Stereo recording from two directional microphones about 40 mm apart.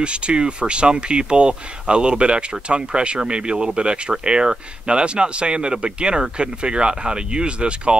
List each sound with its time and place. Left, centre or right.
0.0 s speech: right